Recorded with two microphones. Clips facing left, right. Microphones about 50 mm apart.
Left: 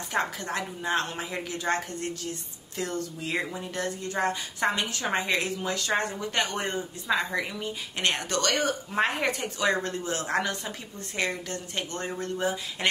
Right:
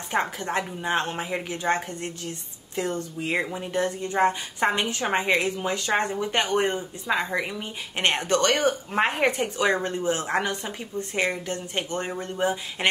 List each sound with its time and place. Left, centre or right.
0.1 s a woman's voice: right